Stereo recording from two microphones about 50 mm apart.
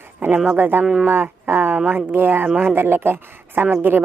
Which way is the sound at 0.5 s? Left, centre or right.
Right.